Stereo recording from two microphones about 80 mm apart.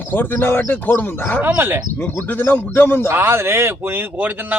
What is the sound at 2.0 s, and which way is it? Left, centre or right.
Speech, left.